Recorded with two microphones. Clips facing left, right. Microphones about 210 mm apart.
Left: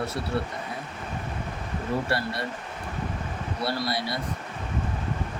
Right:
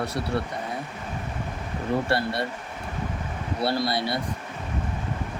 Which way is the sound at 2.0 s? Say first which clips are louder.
Right 3 dB; 25° right (ahead or behind).